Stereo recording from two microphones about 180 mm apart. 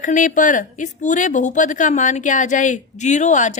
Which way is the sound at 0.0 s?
45° left (ahead or behind).